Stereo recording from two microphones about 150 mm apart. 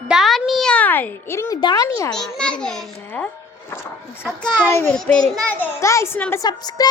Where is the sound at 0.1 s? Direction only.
Centre (ahead or behind); by 1.5 s 15° left (ahead or behind).